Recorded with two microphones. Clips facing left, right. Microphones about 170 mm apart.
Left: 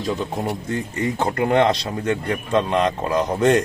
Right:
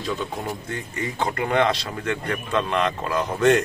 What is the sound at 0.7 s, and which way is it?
Speech, 40° left (ahead or behind).